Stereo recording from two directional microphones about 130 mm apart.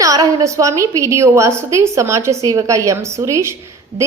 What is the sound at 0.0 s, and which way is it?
A woman's voice, 25° right (ahead or behind).